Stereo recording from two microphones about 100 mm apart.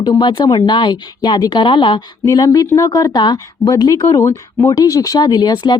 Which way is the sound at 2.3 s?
40° left (ahead or behind).